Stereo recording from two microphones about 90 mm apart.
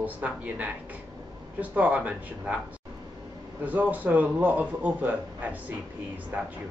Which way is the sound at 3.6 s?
20° right (ahead or behind).